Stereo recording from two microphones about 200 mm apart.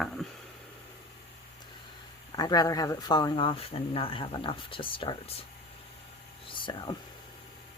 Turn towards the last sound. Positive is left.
turn(degrees=20)  # may be behind; listen again after turning